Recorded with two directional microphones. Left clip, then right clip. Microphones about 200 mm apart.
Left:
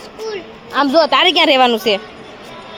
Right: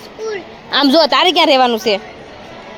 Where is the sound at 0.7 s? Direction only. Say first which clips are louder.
Right 1 dB; 25° right (ahead or behind).